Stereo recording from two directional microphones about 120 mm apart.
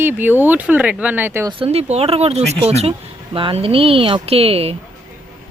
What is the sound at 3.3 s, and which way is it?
Speech, 50° right (ahead or behind).